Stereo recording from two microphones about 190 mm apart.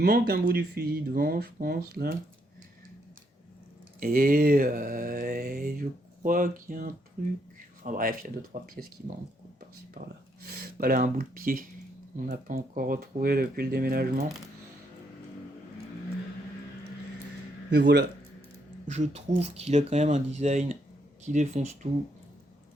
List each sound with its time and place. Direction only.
0.0 s speech: 55° right (ahead or behind)
4.0 s speech: 50° right (ahead or behind)
10.4 s speech: 55° right (ahead or behind)
17.7 s speech: 60° right (ahead or behind)
18.9 s speech: 35° right (ahead or behind)